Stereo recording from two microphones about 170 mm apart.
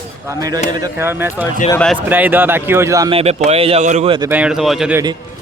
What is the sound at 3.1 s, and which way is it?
Speech, 40° right (ahead or behind).